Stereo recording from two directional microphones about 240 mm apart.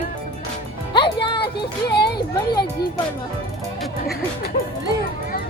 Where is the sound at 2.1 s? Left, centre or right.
Centre.